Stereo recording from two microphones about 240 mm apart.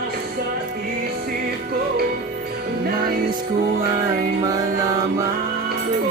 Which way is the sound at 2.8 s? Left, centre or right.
Right.